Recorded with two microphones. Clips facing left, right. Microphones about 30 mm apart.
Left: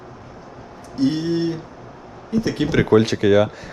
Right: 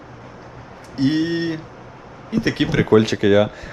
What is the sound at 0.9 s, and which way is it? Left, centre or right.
Speech, right.